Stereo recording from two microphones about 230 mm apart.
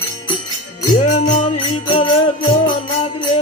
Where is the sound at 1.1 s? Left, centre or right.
Left.